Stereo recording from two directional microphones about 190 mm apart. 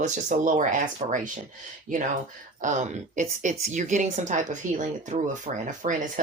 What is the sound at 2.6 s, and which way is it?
Speech, 40° right (ahead or behind).